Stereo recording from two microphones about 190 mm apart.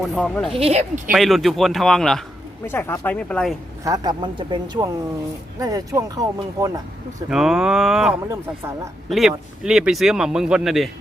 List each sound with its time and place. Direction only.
0.1 s speech: 5° left (ahead or behind)
0.5 s a woman's voice: 35° right (ahead or behind)
1.1 s speech: centre (ahead or behind)
3.8 s speech: 20° right (ahead or behind)
7.3 s speech: centre (ahead or behind)
8.3 s speech: 15° right (ahead or behind)
9.0 s speech: centre (ahead or behind)